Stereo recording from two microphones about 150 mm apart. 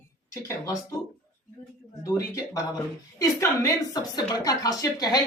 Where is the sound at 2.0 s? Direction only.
25° left (ahead or behind).